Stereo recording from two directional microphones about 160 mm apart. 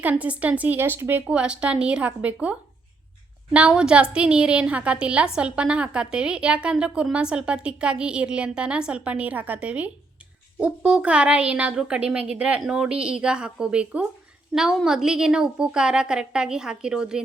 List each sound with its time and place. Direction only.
0.0 s a woman's voice: 10° right (ahead or behind)